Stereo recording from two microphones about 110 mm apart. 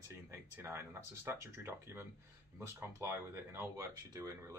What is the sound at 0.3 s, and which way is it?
Speech, 25° right (ahead or behind).